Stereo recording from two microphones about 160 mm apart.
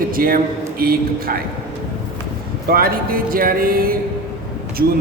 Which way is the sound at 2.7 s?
65° right (ahead or behind).